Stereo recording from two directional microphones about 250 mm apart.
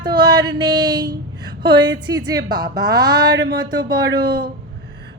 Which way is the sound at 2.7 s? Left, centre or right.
Right.